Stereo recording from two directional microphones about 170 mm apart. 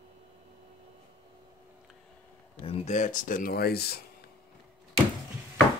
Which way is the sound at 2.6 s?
35° left (ahead or behind).